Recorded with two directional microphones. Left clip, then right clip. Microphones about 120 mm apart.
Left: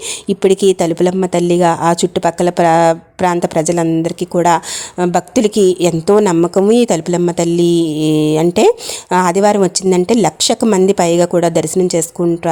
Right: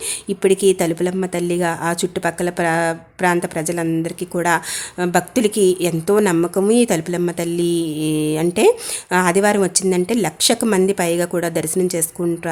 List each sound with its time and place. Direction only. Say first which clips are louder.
0.3 s speech: left 4 dB; 55° left (ahead or behind)